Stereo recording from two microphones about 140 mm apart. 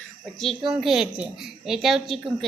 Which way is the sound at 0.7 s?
5° right (ahead or behind).